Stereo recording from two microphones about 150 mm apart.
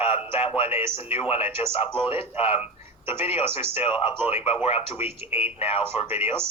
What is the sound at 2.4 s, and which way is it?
Speech, 40° left (ahead or behind).